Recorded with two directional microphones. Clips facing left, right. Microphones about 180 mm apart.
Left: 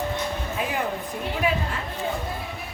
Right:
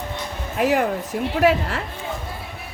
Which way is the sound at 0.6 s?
75° right (ahead or behind).